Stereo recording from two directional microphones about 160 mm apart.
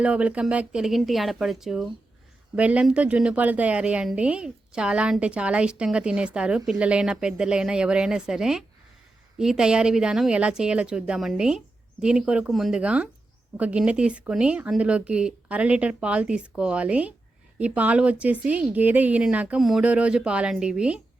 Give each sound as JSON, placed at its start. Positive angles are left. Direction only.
{"t": 0.0, "sound": "a woman's voice", "side_deg": -10}